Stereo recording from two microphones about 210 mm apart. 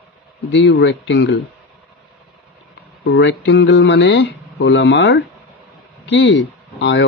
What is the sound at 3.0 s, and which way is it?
Speech, 55° left (ahead or behind).